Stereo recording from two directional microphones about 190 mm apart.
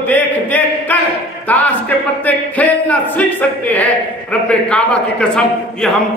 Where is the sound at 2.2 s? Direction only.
10° left (ahead or behind).